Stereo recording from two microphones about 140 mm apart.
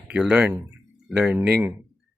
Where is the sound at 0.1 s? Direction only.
5° right (ahead or behind).